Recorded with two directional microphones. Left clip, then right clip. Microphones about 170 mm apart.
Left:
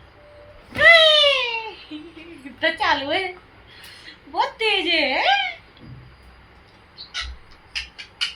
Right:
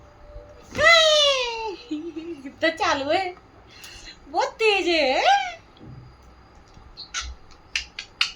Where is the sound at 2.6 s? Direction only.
90° right.